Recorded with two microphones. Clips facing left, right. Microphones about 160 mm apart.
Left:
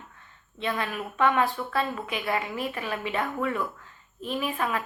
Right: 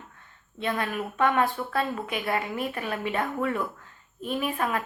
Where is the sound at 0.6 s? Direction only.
45° right (ahead or behind).